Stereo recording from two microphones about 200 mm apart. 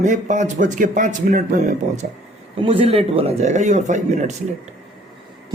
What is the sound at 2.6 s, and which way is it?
Speech, 25° right (ahead or behind).